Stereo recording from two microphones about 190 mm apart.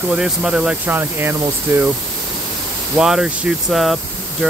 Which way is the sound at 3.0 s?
5° right (ahead or behind).